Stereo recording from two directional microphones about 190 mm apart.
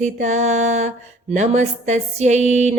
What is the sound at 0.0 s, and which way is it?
Mantra, 40° right (ahead or behind).